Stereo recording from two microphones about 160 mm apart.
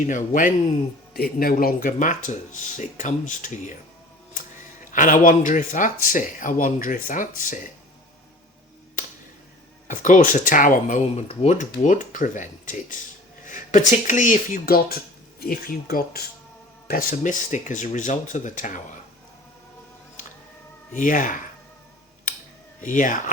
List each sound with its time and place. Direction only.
0.1 s speech: 55° left (ahead or behind)
1.1 s speech: 70° left (ahead or behind); by 3.6 s 50° left (ahead or behind)
4.9 s speech: 55° left (ahead or behind)
9.8 s speech: 55° left (ahead or behind)
20.9 s speech: 55° left (ahead or behind)
22.8 s speech: 55° left (ahead or behind)